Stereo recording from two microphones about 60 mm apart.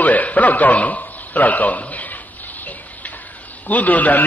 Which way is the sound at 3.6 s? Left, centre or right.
Left.